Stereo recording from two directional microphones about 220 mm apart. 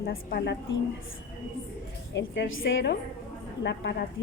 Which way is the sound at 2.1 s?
50° left (ahead or behind).